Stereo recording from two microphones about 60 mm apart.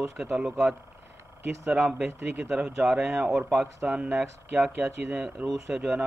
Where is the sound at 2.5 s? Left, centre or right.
Centre.